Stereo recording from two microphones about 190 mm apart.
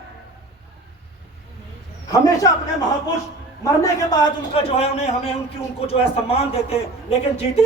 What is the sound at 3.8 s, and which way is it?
A man's voice, 20° left (ahead or behind).